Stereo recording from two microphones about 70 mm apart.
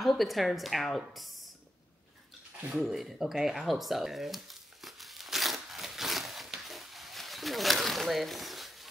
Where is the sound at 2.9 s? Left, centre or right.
Centre.